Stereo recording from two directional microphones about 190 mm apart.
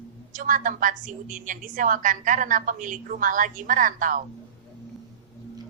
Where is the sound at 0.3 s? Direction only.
45° right (ahead or behind).